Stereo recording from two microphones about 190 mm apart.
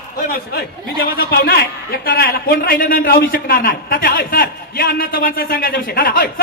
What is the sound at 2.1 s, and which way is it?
A man's voice, 55° left (ahead or behind).